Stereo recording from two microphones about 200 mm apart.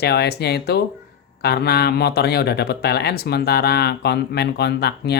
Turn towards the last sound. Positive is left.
turn(degrees=55)  # may be behind; listen again after turning